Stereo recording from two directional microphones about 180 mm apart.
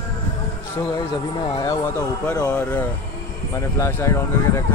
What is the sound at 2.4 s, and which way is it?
Speech, 5° left (ahead or behind).